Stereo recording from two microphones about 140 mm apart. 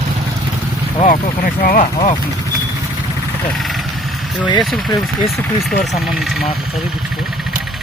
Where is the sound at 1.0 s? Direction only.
80° left.